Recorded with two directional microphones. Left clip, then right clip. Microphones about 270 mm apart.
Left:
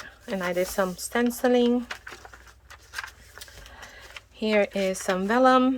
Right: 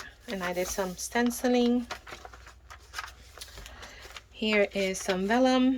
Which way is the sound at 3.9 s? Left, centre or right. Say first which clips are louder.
Left 2 dB; centre.